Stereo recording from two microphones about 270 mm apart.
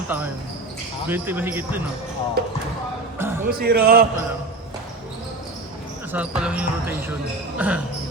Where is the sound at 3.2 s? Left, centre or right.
Centre.